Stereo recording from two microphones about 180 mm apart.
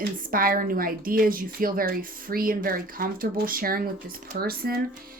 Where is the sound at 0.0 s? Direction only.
55° right (ahead or behind).